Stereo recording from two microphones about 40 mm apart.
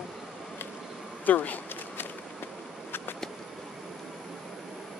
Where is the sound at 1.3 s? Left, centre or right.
Left.